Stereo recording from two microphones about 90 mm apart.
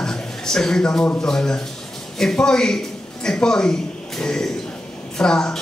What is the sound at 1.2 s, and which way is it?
A man's voice, 5° left (ahead or behind).